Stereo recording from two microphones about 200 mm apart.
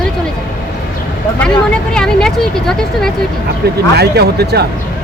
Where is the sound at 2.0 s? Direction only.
5° left (ahead or behind).